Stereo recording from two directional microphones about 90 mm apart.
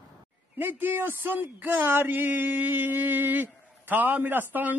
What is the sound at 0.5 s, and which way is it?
Speech, 20° right (ahead or behind).